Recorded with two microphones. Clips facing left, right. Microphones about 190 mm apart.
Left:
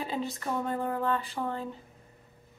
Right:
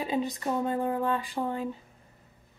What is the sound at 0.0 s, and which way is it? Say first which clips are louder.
Speech: right 4 dB; 15° right (ahead or behind).